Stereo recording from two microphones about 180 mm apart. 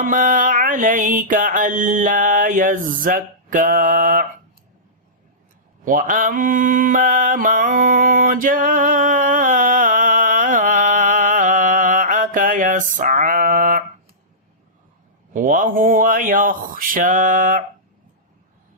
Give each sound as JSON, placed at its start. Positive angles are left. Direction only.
{"t": 0.0, "sound": "mantra", "side_deg": -50}
{"t": 5.8, "sound": "mantra", "side_deg": -50}
{"t": 15.3, "sound": "mantra", "side_deg": -50}